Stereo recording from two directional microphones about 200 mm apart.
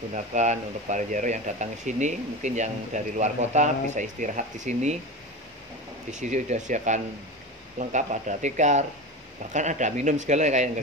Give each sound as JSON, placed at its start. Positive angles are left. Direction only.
{"t": 0.1, "sound": "speech", "side_deg": -35}
{"t": 6.1, "sound": "speech", "side_deg": -35}